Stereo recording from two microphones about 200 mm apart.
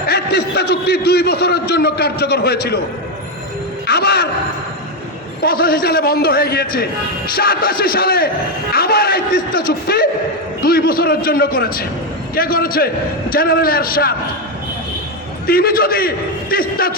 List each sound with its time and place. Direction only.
0.1 s a man's voice: 55° left (ahead or behind)
3.8 s speech: 55° left (ahead or behind)
5.4 s a man's voice: 45° left (ahead or behind)
15.4 s a man's voice: 50° left (ahead or behind)